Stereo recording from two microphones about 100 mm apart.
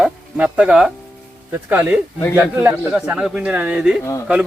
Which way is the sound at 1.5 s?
20° right (ahead or behind).